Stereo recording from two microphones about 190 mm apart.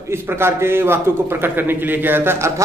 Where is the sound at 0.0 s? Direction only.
10° right (ahead or behind).